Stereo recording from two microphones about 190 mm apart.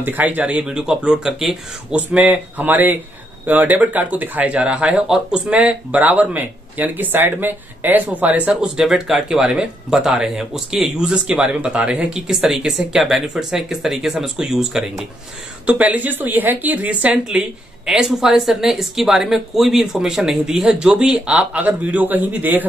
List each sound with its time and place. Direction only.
0.0 s speech: 10° right (ahead or behind)